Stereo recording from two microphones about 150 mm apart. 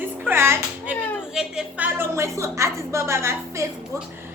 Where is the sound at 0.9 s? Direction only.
10° left (ahead or behind).